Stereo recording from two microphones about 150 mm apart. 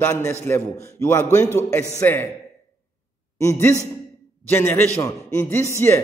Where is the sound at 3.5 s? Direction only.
15° left (ahead or behind).